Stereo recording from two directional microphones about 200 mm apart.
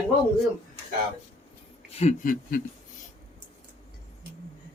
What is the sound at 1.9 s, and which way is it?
Speech, 35° left (ahead or behind).